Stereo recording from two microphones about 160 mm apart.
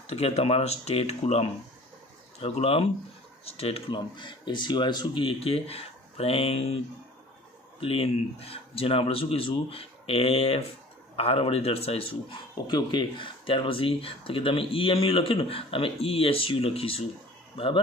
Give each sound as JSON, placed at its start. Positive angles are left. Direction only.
{"t": 0.0, "sound": "speech", "side_deg": 40}
{"t": 7.8, "sound": "speech", "side_deg": 35}